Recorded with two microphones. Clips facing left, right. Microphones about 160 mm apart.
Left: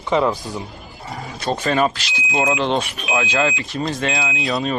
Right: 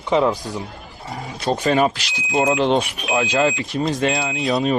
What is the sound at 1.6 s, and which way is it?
Speech, 15° right (ahead or behind).